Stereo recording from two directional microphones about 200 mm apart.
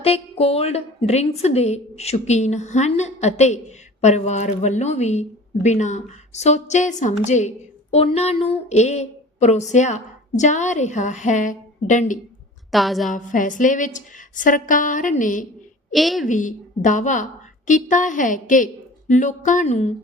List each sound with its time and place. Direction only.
0.0 s a woman's voice: 30° left (ahead or behind)
12.7 s a woman's voice: centre (ahead or behind)
13.1 s a woman's voice: 40° left (ahead or behind)
15.9 s a woman's voice: centre (ahead or behind)
16.2 s a woman's voice: 40° left (ahead or behind)